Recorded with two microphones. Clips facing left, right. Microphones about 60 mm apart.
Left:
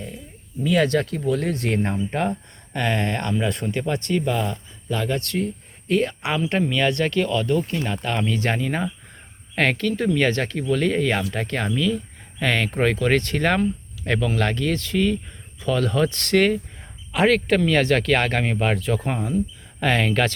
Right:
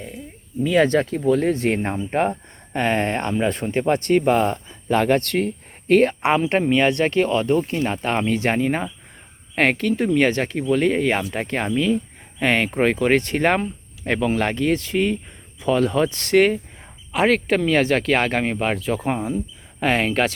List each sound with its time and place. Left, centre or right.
0.6 s speech: right
3.8 s speech: right
6.2 s speech: right; by 20.3 s centre